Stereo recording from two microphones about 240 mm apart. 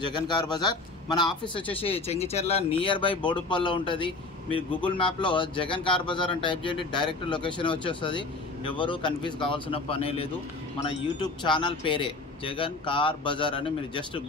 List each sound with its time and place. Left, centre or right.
0.0 s speech: centre